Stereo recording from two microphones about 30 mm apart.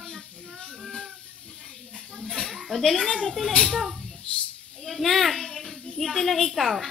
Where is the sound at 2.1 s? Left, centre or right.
Centre.